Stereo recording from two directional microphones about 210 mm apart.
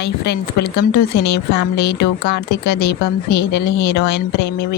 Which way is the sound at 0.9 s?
50° left (ahead or behind).